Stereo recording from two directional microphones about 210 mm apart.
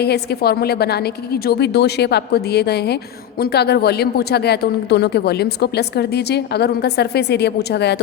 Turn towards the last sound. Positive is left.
turn(degrees=50)  # may be behind; listen again after turning